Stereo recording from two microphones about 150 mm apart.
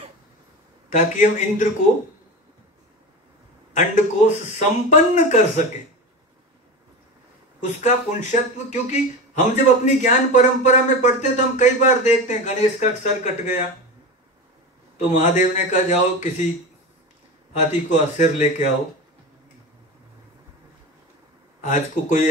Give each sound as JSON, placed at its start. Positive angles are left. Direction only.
{"t": 0.9, "sound": "a man's voice", "side_deg": 55}
{"t": 3.7, "sound": "a man's voice", "side_deg": 55}
{"t": 7.8, "sound": "speech", "side_deg": 55}
{"t": 15.0, "sound": "a man's voice", "side_deg": 55}
{"t": 17.5, "sound": "speech", "side_deg": 50}
{"t": 21.6, "sound": "a man's voice", "side_deg": 60}